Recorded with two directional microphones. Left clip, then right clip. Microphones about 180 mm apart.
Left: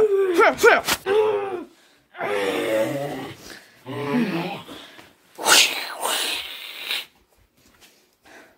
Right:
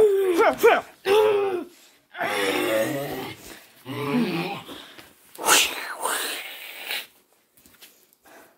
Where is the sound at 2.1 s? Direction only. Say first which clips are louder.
Even; centre (ahead or behind).